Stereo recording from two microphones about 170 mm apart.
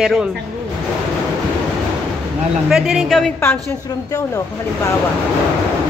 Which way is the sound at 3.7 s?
15° left (ahead or behind).